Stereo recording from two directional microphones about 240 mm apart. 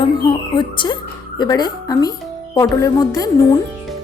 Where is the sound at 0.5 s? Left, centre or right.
Centre.